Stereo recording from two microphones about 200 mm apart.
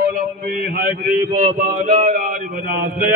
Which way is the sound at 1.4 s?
35° right (ahead or behind).